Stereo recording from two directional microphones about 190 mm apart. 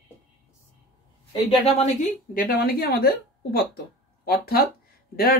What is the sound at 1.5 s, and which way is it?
Speech, 35° left (ahead or behind).